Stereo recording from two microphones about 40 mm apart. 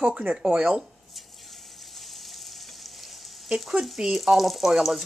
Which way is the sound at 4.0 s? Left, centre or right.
Centre.